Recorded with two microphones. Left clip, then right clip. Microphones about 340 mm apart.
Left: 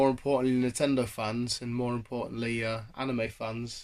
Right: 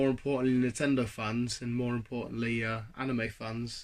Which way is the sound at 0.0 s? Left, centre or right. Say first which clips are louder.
Left 4 dB; centre.